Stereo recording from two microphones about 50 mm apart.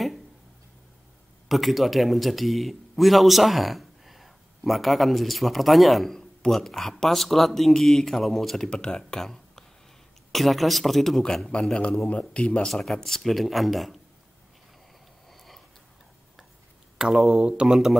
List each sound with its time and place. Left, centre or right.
1.5 s speech: centre
12.1 s speech: left
12.6 s speech: centre
15.2 s sniff: centre
17.0 s speech: centre
17.5 s speech: centre